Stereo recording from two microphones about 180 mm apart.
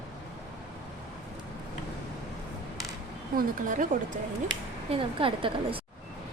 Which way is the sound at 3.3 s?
50° right (ahead or behind).